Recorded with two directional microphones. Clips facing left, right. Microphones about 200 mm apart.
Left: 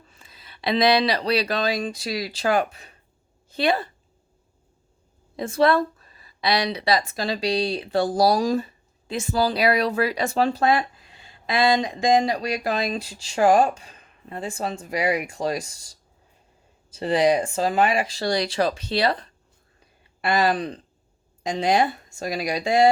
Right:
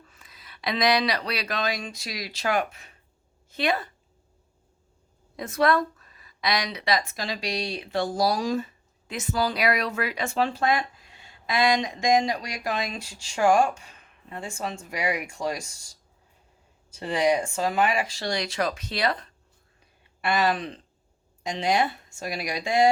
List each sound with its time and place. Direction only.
0.1 s speech: 30° left (ahead or behind)
5.4 s a woman's voice: 30° left (ahead or behind)
17.0 s a woman's voice: 35° left (ahead or behind)